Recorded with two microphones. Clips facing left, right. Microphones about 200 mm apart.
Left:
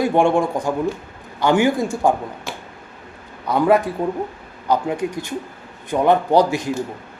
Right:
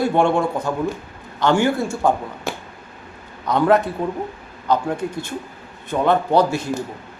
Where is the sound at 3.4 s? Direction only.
10° left (ahead or behind).